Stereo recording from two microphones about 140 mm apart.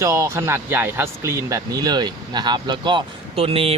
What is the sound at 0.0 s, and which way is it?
Speech, 20° right (ahead or behind).